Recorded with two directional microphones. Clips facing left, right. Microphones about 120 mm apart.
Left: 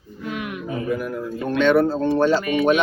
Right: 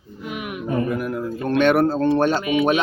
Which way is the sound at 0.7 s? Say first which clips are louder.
Right 3 dB; 55° right (ahead or behind).